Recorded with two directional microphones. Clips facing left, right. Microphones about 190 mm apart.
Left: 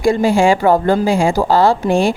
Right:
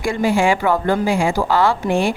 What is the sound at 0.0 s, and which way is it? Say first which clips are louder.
A woman's voice: left 5 dB; 35° left (ahead or behind).